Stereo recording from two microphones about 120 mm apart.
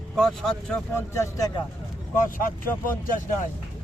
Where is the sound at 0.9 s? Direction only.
25° left (ahead or behind).